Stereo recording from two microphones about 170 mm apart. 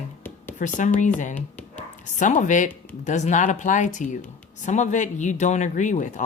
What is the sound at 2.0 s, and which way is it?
Speech, 45° left (ahead or behind).